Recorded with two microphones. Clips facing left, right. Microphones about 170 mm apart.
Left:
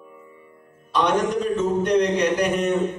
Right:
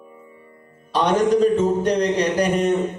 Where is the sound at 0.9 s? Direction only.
35° right (ahead or behind).